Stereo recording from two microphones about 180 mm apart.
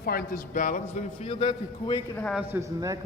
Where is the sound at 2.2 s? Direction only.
5° left (ahead or behind).